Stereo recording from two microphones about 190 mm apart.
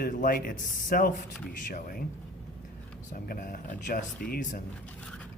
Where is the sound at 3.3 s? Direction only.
50° left (ahead or behind).